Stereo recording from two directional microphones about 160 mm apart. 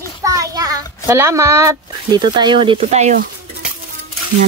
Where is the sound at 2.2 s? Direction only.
30° right (ahead or behind).